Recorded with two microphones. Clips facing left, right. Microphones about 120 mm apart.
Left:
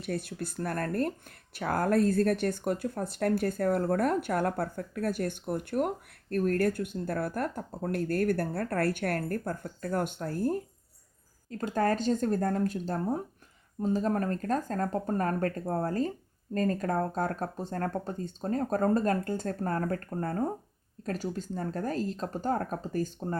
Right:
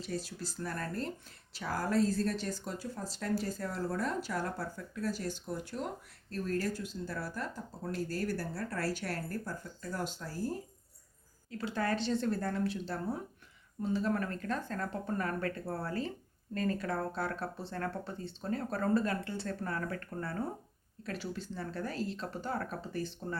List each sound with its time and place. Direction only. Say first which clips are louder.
0.0 s speech: left 5 dB; 60° left (ahead or behind)
11.4 s speech: left 6 dB; 45° left (ahead or behind)